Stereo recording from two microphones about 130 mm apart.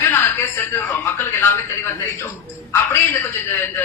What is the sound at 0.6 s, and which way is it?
A man's voice, 15° left (ahead or behind).